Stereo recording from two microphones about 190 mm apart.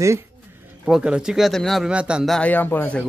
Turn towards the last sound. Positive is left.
turn(degrees=10)  # may be behind; listen again after turning